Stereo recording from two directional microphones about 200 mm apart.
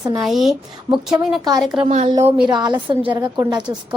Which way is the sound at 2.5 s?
20° right (ahead or behind).